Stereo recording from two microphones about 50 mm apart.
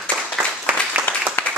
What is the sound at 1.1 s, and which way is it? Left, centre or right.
Clapping, left.